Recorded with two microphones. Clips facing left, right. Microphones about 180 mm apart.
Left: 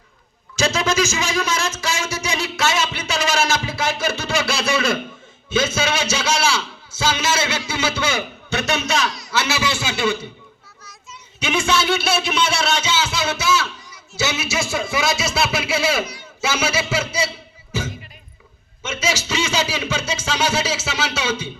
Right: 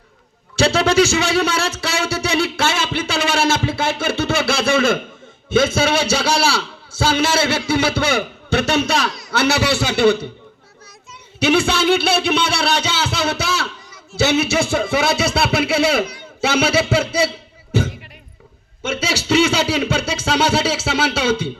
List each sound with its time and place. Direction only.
0.5 s a sound: 60° right (ahead or behind)
2.4 s a man's voice: 55° right (ahead or behind)
6.3 s a man's voice: 35° right (ahead or behind)
6.9 s a man's voice: 60° right (ahead or behind)
11.3 s speech: 65° right (ahead or behind)
17.7 s music: 60° right (ahead or behind)
18.8 s speech: 60° right (ahead or behind)